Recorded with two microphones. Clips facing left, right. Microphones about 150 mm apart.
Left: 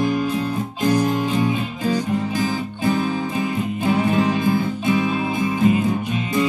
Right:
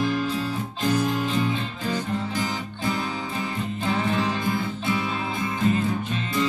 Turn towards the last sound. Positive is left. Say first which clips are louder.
# left 5 dB
turn(degrees=15)  # may be behind; listen again after turning